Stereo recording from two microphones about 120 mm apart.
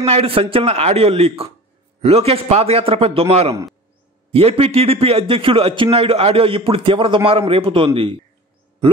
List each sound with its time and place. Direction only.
0.0 s a man's voice: 55° right (ahead or behind)